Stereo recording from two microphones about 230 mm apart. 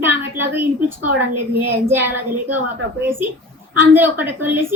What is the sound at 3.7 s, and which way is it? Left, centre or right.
A woman's voice, centre.